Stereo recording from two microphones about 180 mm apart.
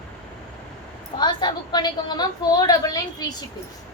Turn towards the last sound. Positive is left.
turn(degrees=20)  # may be behind; listen again after turning